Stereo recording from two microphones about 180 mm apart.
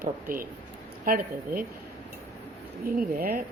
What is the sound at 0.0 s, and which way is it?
Speech, 50° right (ahead or behind).